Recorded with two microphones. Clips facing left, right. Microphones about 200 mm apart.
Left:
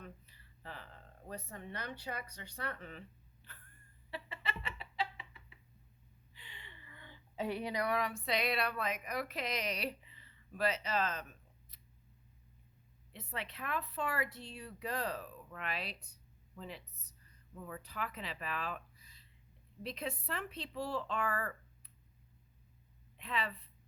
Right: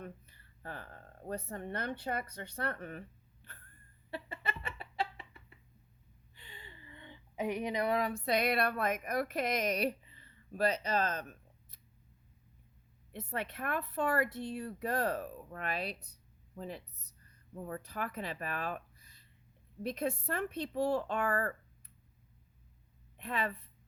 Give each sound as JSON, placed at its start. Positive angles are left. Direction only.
{"t": 0.0, "sound": "speech", "side_deg": -50}
{"t": 4.1, "sound": "chicken", "side_deg": -45}
{"t": 6.5, "sound": "a woman's voice", "side_deg": -35}
{"t": 13.1, "sound": "speech", "side_deg": -50}
{"t": 19.8, "sound": "speech", "side_deg": -50}
{"t": 23.1, "sound": "a woman's voice", "side_deg": -50}